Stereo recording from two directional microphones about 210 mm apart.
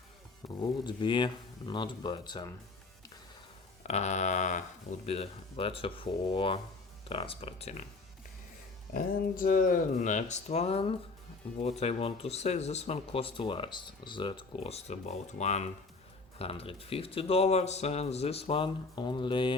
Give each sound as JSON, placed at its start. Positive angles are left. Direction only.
{"t": 0.4, "sound": "speech", "side_deg": 20}
{"t": 3.8, "sound": "speech", "side_deg": 30}
{"t": 8.9, "sound": "speech", "side_deg": 40}